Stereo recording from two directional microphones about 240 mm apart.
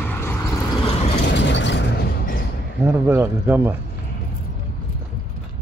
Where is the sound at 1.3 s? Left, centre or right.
Left.